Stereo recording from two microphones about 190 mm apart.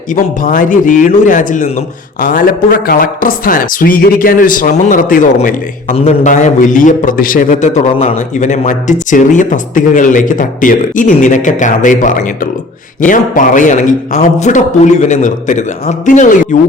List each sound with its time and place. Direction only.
0.2 s a man's voice: 45° left (ahead or behind)